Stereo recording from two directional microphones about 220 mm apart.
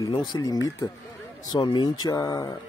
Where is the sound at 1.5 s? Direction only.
20° left (ahead or behind).